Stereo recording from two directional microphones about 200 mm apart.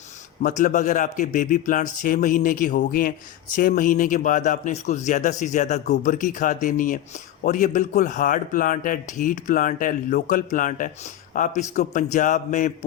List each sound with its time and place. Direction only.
0.4 s a man's voice: 40° left (ahead or behind)